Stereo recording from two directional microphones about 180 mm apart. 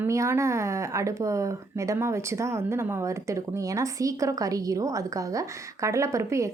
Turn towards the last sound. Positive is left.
turn(degrees=-15)  # may be behind; listen again after turning